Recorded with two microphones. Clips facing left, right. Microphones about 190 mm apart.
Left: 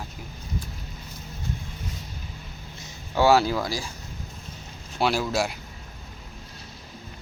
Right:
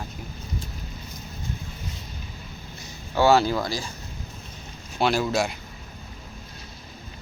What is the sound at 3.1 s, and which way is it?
Speech, 10° left (ahead or behind).